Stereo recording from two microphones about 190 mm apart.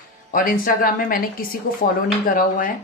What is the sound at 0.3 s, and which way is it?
A woman's voice, 45° left (ahead or behind).